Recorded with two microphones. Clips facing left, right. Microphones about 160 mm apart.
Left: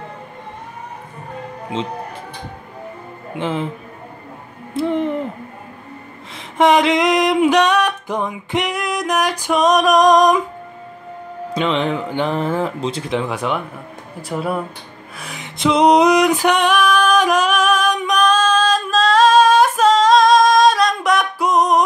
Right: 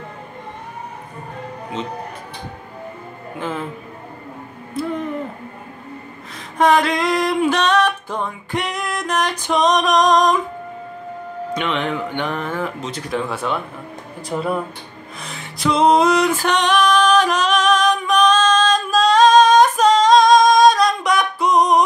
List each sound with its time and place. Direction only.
3.3 s speech: 25° left (ahead or behind)
4.7 s a sound: 25° left (ahead or behind)
6.6 s music: 20° left (ahead or behind)
11.5 s speech: 30° left (ahead or behind); by 14.6 s 5° left (ahead or behind)
15.1 s music: 10° left (ahead or behind)